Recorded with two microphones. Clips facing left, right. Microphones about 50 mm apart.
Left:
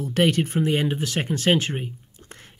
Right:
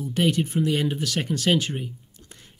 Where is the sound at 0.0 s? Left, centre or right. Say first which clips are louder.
Left 2 dB; left.